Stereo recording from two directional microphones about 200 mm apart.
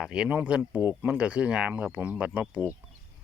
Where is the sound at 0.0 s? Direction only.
5° right (ahead or behind).